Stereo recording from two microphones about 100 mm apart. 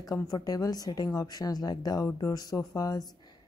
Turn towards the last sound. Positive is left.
turn(degrees=35)  # may be behind; listen again after turning